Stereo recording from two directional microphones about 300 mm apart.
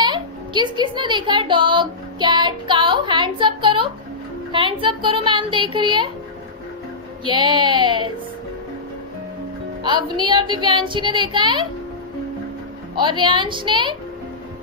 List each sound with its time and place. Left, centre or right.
0.0 s speech: centre
7.2 s speech: centre
9.8 s speech: centre
12.9 s speech: centre